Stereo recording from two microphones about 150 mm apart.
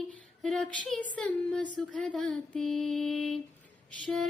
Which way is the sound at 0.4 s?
Centre (ahead or behind).